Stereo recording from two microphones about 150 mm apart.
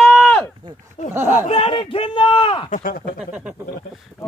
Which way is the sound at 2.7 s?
70° left (ahead or behind).